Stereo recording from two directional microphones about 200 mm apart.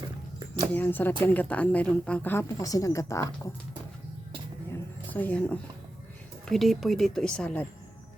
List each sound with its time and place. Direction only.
0.3 s a sound: 20° right (ahead or behind)
0.7 s a woman's voice: 10° left (ahead or behind)
5.1 s a woman's voice: 5° left (ahead or behind)